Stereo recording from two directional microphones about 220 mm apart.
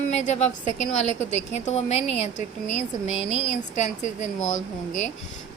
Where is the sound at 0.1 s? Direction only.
30° left (ahead or behind).